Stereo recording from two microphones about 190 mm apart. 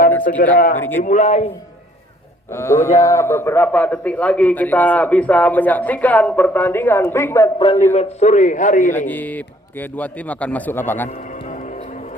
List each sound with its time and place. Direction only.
0.5 s a man's voice: 45° left (ahead or behind)
0.8 s a man's voice: 10° left (ahead or behind)
1.0 s a man's voice: 40° left (ahead or behind)
2.5 s a man's voice: 15° left (ahead or behind)
7.9 s a man's voice: 35° left (ahead or behind)
9.0 s a man's voice: 10° left (ahead or behind)
11.4 s music: 40° left (ahead or behind)